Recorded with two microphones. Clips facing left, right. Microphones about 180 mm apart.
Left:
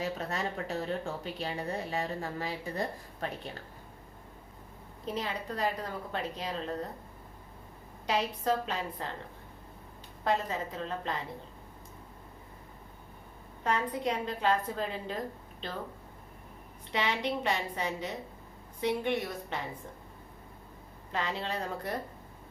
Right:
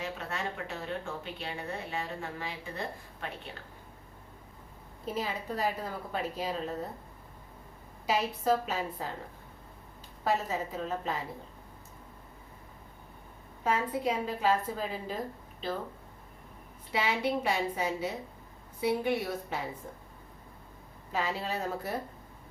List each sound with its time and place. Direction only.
0.0 s speech: 35° left (ahead or behind)
5.0 s a woman's voice: 5° right (ahead or behind)
8.0 s a woman's voice: 5° right (ahead or behind)
10.2 s a woman's voice: 5° right (ahead or behind)
13.7 s a woman's voice: 5° right (ahead or behind)
16.9 s a woman's voice: 5° right (ahead or behind)
21.1 s a woman's voice: 5° right (ahead or behind)